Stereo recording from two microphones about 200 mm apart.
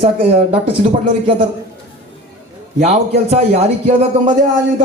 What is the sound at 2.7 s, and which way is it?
A man's voice, 35° right (ahead or behind).